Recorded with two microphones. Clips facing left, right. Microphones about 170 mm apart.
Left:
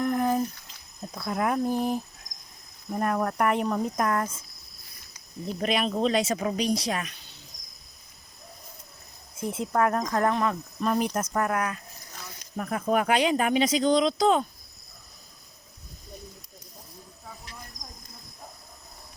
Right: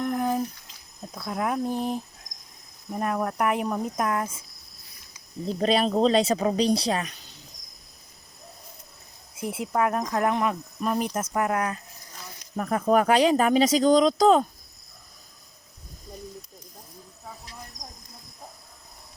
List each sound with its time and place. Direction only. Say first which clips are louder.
0.0 s a sound: left 1 dB; centre (ahead or behind)
1.1 s speech: left 1 dB; centre (ahead or behind)
5.5 s speech: right 4 dB; 30° right (ahead or behind)
9.3 s cricket: even; 15° right (ahead or behind)
9.6 s speech: even; 5° right (ahead or behind)
10.8 s speech: left 1 dB; 5° right (ahead or behind)
11.3 s speech: right 2 dB; 25° right (ahead or behind)
12.5 s speech: right 4 dB; 40° right (ahead or behind)